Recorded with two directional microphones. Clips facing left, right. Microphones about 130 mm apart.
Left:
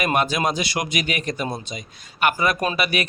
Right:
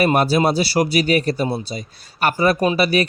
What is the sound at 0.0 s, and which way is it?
A man's voice, 35° right (ahead or behind).